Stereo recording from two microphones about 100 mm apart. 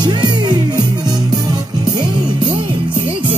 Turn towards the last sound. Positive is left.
turn(degrees=-55)  # may be behind; listen again after turning